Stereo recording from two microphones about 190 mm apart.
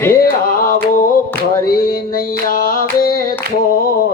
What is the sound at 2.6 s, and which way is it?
Music, 50° left (ahead or behind).